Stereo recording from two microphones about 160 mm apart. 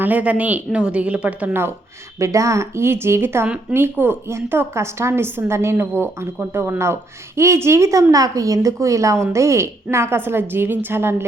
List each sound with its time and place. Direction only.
0.0 s speech: 10° right (ahead or behind)